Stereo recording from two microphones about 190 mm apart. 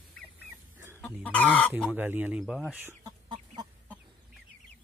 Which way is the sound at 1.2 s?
5° left (ahead or behind).